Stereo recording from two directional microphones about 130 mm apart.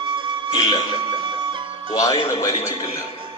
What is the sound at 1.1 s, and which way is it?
Music, 40° right (ahead or behind).